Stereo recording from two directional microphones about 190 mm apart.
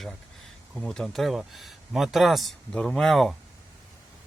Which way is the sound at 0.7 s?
Centre (ahead or behind).